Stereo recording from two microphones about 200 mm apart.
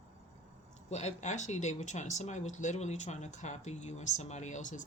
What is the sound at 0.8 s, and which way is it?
Speech, 35° left (ahead or behind).